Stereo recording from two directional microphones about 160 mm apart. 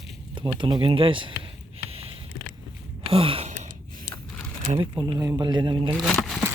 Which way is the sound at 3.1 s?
35° right (ahead or behind).